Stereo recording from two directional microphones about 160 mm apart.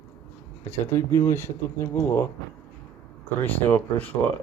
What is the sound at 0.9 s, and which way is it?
Speech, 15° left (ahead or behind).